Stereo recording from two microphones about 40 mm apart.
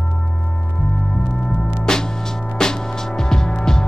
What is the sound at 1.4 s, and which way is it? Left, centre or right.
Music, centre.